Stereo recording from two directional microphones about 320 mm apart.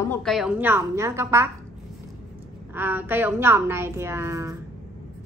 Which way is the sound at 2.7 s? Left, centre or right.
Centre.